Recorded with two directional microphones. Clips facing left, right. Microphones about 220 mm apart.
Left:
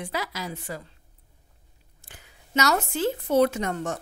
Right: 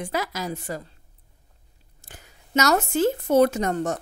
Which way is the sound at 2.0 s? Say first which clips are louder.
Right 3 dB; 45° right (ahead or behind).